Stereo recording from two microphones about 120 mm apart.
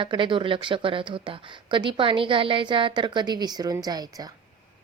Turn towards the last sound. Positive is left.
turn(degrees=-35)  # may be behind; listen again after turning